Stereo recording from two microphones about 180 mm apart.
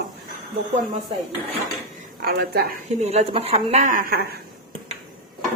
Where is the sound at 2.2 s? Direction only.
60° right (ahead or behind).